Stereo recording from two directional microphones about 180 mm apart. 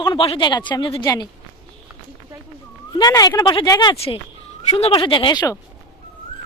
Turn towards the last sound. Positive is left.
turn(degrees=20)  # may be behind; listen again after turning